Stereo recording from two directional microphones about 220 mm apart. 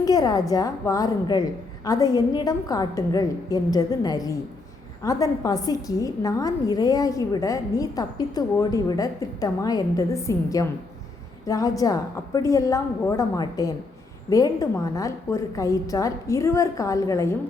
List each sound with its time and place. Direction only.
0.0 s a woman's voice: 15° left (ahead or behind)